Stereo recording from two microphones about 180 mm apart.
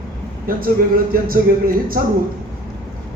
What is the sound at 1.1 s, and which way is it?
Speech, 50° right (ahead or behind).